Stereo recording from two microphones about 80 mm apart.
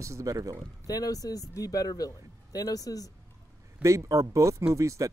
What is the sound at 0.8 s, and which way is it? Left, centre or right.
A man's voice, left.